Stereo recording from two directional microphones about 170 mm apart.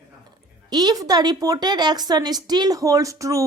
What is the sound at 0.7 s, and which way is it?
A woman's voice, 25° right (ahead or behind).